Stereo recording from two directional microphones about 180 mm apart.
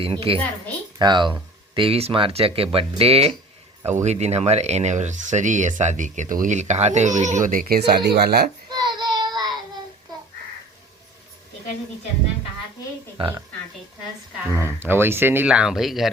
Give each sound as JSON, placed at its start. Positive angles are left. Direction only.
{"t": 0.0, "sound": "speech", "side_deg": -30}
{"t": 8.7, "sound": "child singing", "side_deg": -25}
{"t": 13.1, "sound": "speech", "side_deg": -30}
{"t": 14.5, "sound": "speech", "side_deg": -15}